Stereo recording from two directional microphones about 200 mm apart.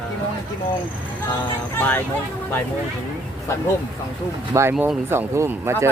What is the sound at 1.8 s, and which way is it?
Speech, 10° left (ahead or behind).